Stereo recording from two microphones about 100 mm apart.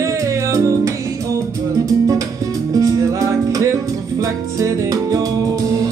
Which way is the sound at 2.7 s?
35° right (ahead or behind).